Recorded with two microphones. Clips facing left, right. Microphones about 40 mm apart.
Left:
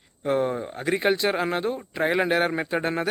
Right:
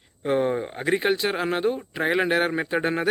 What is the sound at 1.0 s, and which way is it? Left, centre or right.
Speech, centre.